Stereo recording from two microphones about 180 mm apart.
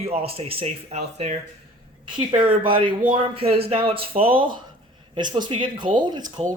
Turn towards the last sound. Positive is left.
turn(degrees=-25)  # may be behind; listen again after turning